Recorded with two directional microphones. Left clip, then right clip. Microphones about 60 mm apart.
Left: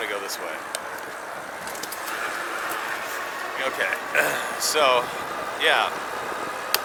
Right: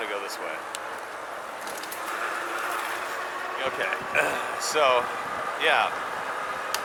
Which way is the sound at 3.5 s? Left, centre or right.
Left.